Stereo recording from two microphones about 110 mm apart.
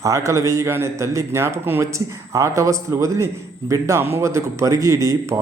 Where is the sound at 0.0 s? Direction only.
30° right (ahead or behind).